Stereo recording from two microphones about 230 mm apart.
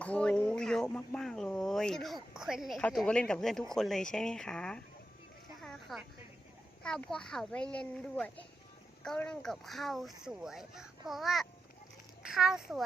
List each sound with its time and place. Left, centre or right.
0.0 s speech: centre
5.6 s a sound: centre
6.8 s speech: centre